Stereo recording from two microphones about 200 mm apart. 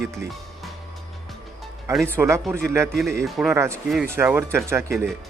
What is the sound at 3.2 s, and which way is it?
Speech, centre (ahead or behind).